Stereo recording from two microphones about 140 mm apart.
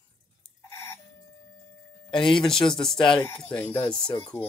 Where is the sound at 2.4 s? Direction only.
5° left (ahead or behind).